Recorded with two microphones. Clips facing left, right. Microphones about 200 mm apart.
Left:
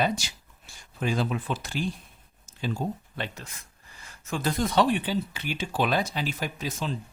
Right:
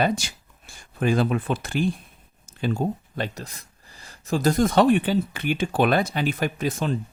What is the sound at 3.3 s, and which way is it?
Speech, 35° right (ahead or behind).